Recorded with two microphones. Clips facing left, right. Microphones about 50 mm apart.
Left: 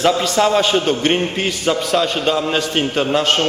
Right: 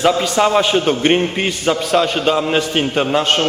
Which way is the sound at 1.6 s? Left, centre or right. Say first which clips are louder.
Right 2 dB; centre.